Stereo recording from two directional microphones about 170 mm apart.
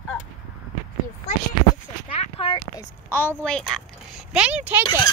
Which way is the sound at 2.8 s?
15° left (ahead or behind).